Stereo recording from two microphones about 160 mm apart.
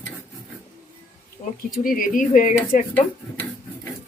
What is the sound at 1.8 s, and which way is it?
Speech, 60° left (ahead or behind).